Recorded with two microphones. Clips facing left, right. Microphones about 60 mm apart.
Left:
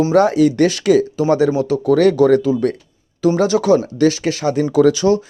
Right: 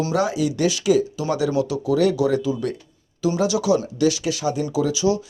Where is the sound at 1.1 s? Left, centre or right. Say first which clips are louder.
Left 7 dB; left.